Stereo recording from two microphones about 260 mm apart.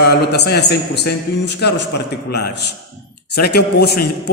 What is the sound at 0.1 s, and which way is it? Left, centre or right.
A man's voice, left.